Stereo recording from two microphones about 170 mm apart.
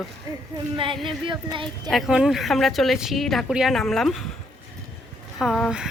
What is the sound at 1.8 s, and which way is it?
A woman's voice, centre (ahead or behind).